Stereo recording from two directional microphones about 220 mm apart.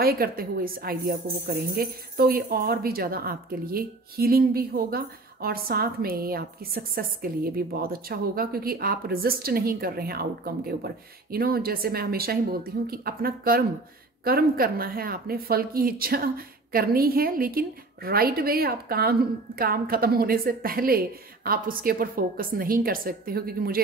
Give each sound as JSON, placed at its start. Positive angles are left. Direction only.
{"t": 0.0, "sound": "a woman's voice", "side_deg": -45}